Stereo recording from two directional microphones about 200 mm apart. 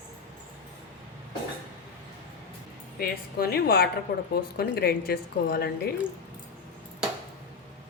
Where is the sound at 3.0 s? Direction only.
50° left (ahead or behind).